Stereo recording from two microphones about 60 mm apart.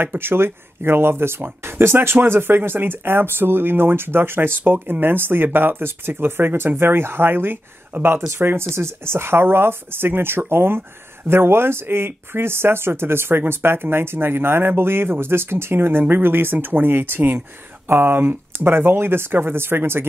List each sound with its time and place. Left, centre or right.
0.0 s speech: right